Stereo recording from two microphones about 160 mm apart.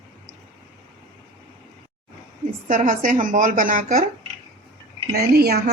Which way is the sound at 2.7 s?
55° right (ahead or behind).